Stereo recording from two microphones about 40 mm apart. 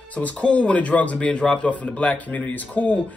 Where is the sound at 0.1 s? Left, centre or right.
Left.